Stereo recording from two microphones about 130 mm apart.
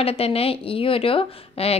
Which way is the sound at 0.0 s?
50° left (ahead or behind).